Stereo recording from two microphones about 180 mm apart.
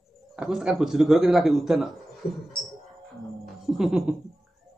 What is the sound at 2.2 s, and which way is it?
Music, 60° left (ahead or behind).